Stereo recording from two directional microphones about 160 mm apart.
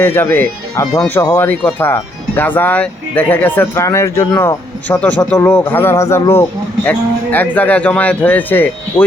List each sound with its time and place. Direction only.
0.0 s speech: 15° left (ahead or behind)